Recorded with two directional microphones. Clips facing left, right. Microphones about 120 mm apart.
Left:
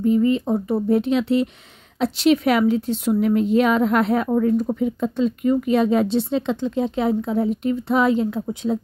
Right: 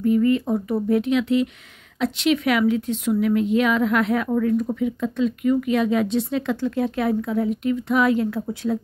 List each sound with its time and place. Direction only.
0.0 s a woman's voice: 25° left (ahead or behind)